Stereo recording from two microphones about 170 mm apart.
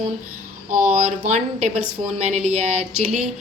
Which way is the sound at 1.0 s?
40° right (ahead or behind).